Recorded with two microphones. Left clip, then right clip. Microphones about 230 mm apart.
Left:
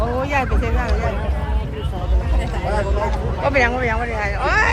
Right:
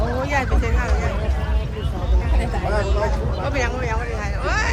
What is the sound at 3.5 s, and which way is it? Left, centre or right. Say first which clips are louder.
Vehicle: left 8 dB; left.